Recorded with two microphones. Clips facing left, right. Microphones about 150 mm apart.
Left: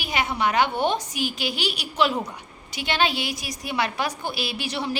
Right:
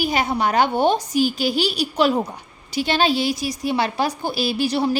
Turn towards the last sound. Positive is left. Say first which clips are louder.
# right 8 dB
turn(degrees=-35)  # may be behind; listen again after turning